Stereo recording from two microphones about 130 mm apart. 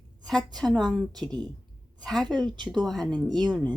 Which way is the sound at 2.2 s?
35° right (ahead or behind).